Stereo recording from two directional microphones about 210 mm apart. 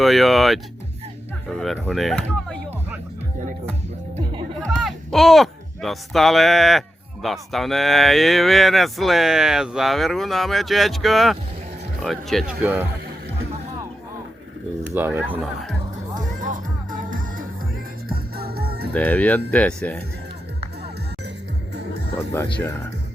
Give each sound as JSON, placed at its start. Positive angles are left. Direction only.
{"t": 0.0, "sound": "speech", "side_deg": 0}
{"t": 4.2, "sound": "music", "side_deg": -25}
{"t": 4.6, "sound": "speech", "side_deg": 0}
{"t": 14.8, "sound": "speech", "side_deg": -10}
{"t": 16.3, "sound": "music", "side_deg": -40}
{"t": 18.9, "sound": "speech", "side_deg": 5}